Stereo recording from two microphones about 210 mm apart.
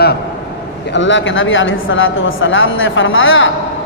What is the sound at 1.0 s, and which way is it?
A woman's voice, 60° left (ahead or behind).